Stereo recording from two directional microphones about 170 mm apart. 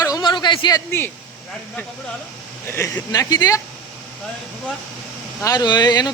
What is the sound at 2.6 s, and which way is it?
Speech, 15° left (ahead or behind).